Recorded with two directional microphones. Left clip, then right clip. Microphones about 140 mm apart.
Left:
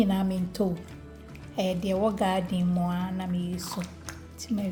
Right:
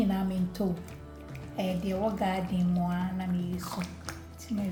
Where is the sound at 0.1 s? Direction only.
60° left (ahead or behind).